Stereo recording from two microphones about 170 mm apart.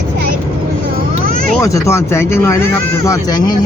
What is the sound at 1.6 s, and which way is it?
Speech, 15° left (ahead or behind).